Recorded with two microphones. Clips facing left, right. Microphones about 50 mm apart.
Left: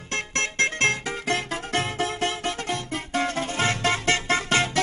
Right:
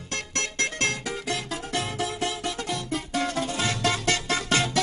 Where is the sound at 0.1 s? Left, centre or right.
Left.